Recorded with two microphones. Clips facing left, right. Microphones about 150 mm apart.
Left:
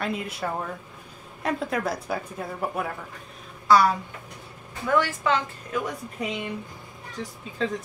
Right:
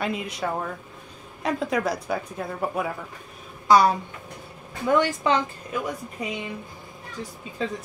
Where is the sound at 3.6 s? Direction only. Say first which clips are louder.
Right 1 dB; 20° right (ahead or behind).